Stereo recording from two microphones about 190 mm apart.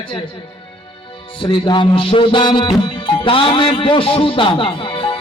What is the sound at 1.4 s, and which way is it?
Music, 25° left (ahead or behind).